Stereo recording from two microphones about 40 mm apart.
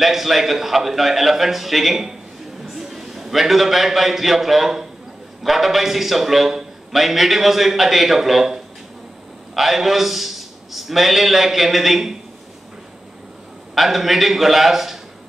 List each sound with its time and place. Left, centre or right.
0.0 s a man's voice: centre
9.6 s a man's voice: centre
13.7 s a man's voice: centre